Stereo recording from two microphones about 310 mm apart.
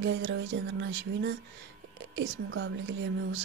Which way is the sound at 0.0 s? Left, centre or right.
Right.